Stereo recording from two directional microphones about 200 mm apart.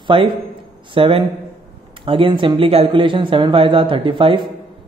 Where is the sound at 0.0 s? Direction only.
25° right (ahead or behind).